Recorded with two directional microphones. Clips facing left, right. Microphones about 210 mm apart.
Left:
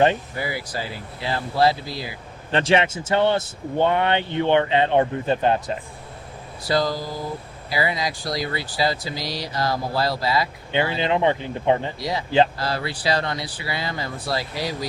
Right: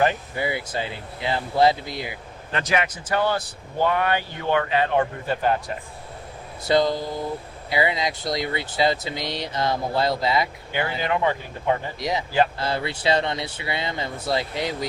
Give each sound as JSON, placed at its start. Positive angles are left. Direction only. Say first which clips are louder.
{"t": 0.3, "sound": "speech", "louder": "right 2 dB", "side_deg": -25}
{"t": 2.5, "sound": "speech", "louder": "left 5 dB", "side_deg": 30}
{"t": 6.7, "sound": "speech", "louder": "right 2 dB", "side_deg": -20}
{"t": 10.7, "sound": "speech", "louder": "left 7 dB", "side_deg": 25}
{"t": 11.9, "sound": "speech", "louder": "left 2 dB", "side_deg": -20}